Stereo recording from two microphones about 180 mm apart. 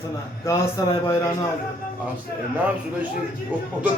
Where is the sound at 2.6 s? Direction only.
10° right (ahead or behind).